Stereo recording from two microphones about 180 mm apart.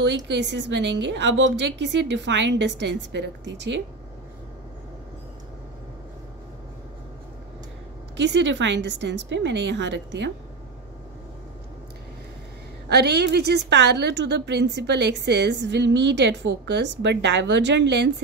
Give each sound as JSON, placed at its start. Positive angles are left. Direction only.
{"t": 0.0, "sound": "a woman's voice", "side_deg": -75}
{"t": 8.2, "sound": "a woman's voice", "side_deg": -80}
{"t": 12.9, "sound": "a woman's voice", "side_deg": -65}